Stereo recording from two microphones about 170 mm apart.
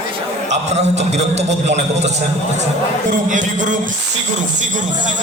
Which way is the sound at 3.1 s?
50° right (ahead or behind).